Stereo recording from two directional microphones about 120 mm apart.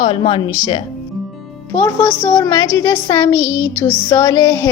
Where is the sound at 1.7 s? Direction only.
20° left (ahead or behind).